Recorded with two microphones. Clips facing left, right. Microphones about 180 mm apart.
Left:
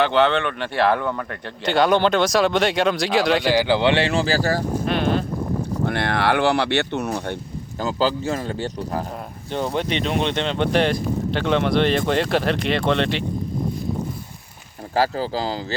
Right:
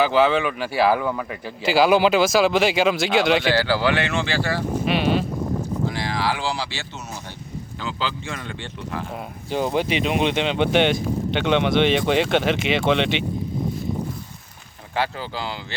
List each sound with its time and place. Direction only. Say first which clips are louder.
0.0 s speech: even; 5° right (ahead or behind)
3.5 s speech: left 3 dB; 20° left (ahead or behind); by 4.6 s 40° left (ahead or behind)
4.9 s sheep: right 1 dB; 5° right (ahead or behind)
5.8 s speech: left 6 dB; 60° left (ahead or behind)
7.8 s speech: left 8 dB; 40° left (ahead or behind)
9.5 s speech: right 1 dB; 5° right (ahead or behind)
14.9 s speech: left 5 dB; 40° left (ahead or behind)